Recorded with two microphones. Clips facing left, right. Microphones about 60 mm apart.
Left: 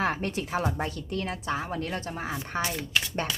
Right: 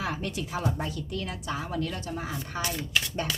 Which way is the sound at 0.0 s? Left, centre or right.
Left.